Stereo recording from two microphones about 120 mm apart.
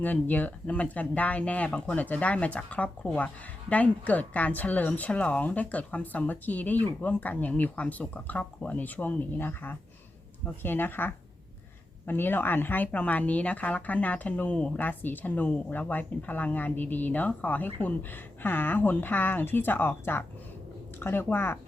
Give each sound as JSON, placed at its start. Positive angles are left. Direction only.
{"t": 0.0, "sound": "speech", "side_deg": 15}